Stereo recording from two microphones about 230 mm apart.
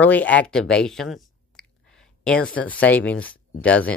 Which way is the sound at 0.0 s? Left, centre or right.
Centre.